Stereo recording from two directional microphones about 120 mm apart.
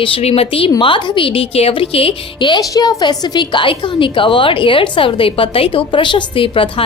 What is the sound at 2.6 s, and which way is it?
A woman's voice, 35° left (ahead or behind).